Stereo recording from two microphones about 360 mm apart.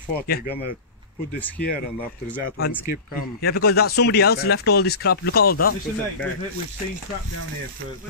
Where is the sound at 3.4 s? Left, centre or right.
Left.